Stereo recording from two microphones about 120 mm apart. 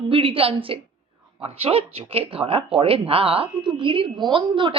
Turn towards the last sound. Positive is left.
turn(degrees=-45)  # may be behind; listen again after turning